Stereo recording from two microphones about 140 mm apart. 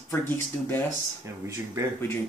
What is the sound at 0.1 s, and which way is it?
Speech, 15° left (ahead or behind).